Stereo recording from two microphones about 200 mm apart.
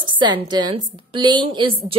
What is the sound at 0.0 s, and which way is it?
A woman's voice, 25° right (ahead or behind).